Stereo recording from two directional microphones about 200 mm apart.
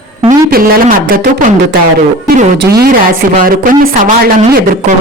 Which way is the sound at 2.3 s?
50° right (ahead or behind).